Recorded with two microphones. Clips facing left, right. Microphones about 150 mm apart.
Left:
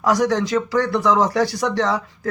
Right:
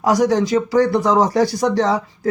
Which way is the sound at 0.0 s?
35° right (ahead or behind).